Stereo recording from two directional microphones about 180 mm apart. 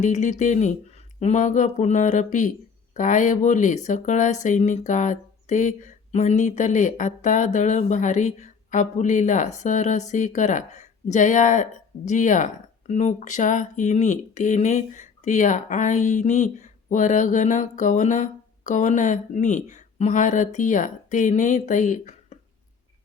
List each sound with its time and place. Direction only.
0.0 s speech: 40° left (ahead or behind)